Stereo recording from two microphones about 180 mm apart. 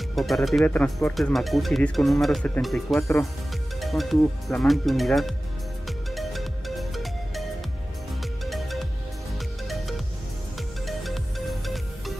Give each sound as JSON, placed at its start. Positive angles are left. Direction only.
{"t": 0.1, "sound": "speech", "side_deg": 0}
{"t": 5.9, "sound": "music", "side_deg": 0}
{"t": 8.5, "sound": "music", "side_deg": 0}